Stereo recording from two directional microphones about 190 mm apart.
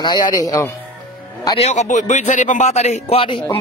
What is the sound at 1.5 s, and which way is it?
A man's voice, 35° left (ahead or behind).